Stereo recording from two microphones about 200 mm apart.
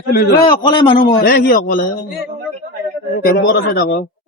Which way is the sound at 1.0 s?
50° left (ahead or behind).